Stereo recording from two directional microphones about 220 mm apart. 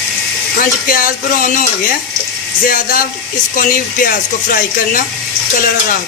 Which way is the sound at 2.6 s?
40° left (ahead or behind).